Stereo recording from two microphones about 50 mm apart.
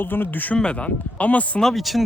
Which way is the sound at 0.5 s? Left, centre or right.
Left.